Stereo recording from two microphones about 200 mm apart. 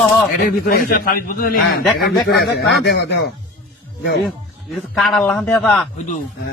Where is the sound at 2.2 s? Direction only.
55° left (ahead or behind).